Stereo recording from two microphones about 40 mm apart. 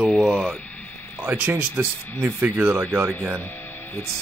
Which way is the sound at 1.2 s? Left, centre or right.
Right.